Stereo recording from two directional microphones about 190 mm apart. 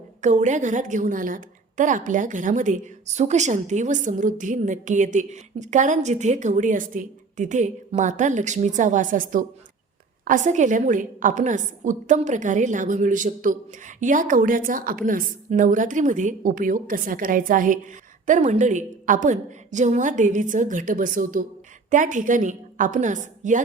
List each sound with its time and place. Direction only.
0.2 s a woman's voice: 40° right (ahead or behind)